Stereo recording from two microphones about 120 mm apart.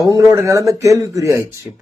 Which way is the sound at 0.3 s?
25° right (ahead or behind).